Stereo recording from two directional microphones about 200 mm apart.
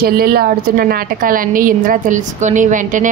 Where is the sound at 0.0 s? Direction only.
50° right (ahead or behind).